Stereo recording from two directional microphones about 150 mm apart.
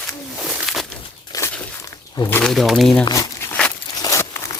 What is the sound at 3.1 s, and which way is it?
Crumpling, 20° left (ahead or behind).